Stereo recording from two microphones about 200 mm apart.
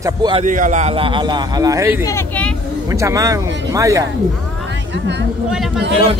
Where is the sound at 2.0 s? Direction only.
10° left (ahead or behind).